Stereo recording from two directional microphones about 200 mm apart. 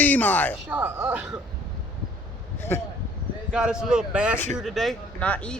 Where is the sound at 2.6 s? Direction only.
10° left (ahead or behind).